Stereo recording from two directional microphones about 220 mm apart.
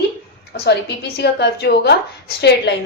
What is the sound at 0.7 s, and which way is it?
A woman's voice, 50° left (ahead or behind).